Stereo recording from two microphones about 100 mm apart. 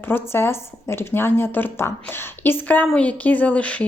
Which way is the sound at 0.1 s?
25° left (ahead or behind).